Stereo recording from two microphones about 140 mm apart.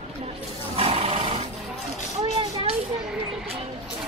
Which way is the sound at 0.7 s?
45° right (ahead or behind).